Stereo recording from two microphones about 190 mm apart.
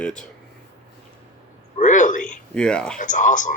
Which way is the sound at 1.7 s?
40° left (ahead or behind).